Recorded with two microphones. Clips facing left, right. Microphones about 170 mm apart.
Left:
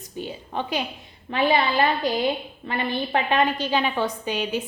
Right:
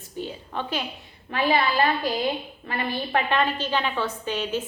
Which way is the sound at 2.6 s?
20° left (ahead or behind).